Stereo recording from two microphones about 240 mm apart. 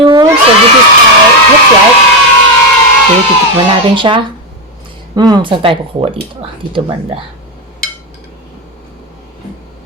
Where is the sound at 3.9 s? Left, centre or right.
Centre.